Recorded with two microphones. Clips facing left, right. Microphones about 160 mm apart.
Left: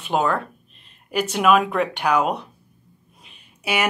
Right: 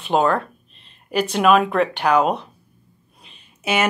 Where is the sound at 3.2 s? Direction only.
10° left (ahead or behind).